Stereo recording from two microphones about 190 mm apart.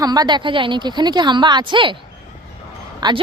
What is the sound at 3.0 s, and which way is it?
Speech, 20° right (ahead or behind).